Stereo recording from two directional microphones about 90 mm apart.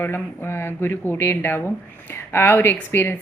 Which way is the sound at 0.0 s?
25° left (ahead or behind).